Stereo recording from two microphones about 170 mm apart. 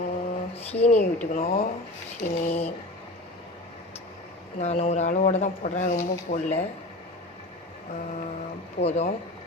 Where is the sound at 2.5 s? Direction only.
35° left (ahead or behind).